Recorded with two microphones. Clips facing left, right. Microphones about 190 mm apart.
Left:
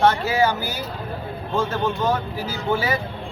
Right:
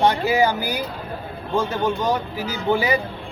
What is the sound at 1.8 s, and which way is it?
Speech, 15° right (ahead or behind).